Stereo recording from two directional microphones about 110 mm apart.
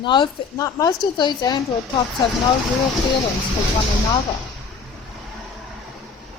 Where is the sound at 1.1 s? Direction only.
40° left (ahead or behind).